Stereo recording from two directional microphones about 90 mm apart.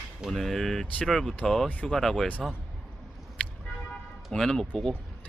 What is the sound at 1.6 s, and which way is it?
Speech, 20° left (ahead or behind).